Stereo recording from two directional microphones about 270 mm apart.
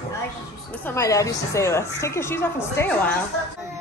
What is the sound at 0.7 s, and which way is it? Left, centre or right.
A woman's voice, centre.